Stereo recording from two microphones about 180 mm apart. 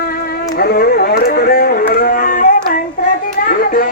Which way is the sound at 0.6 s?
55° left (ahead or behind).